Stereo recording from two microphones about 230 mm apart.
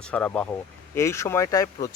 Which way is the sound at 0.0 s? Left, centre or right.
Centre.